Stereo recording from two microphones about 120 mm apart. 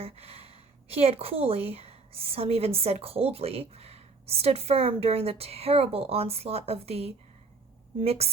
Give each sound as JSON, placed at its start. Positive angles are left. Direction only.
{"t": 0.0, "sound": "a woman's voice", "side_deg": -55}